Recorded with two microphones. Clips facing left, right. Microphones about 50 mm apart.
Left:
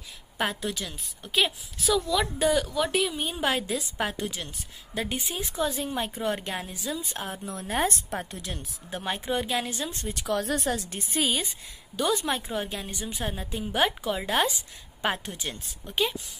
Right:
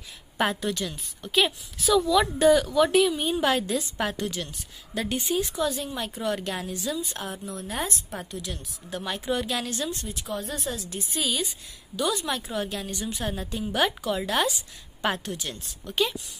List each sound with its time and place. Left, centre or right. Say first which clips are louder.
0.4 s a woman's voice: right 3 dB; centre
5.6 s a woman's voice: even; left
6.5 s a woman's voice: right 2 dB; centre
7.1 s a woman's voice: even; left
7.4 s a woman's voice: left 6 dB; left
8.9 s a woman's voice: right 1 dB; left
9.5 s a woman's voice: even; centre
10.2 s speech: left 6 dB; left
10.5 s a woman's voice: left 4 dB; left
12.6 s a woman's voice: right 3 dB; centre
15.0 s a woman's voice: right 1 dB; centre